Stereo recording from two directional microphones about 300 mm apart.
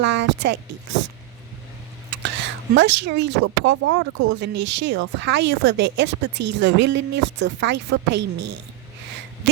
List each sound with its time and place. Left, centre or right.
0.0 s speech: right
2.2 s speech: right